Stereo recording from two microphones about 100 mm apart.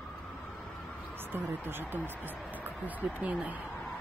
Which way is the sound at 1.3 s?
20° right (ahead or behind).